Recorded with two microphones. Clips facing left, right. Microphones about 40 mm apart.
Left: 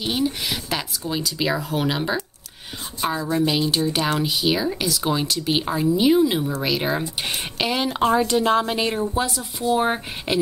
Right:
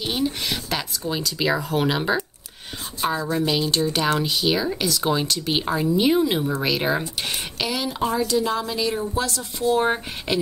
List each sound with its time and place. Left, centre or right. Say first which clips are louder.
0.0 s speech: left 1 dB; centre
7.2 s speech: left 1 dB; centre
7.6 s speech: left 3 dB; left
7.9 s a woman's voice: left 3 dB; left
8.9 s speech: left 2 dB; left